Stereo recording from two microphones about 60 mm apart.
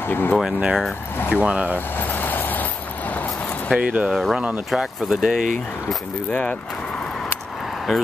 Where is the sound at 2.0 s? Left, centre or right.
Left.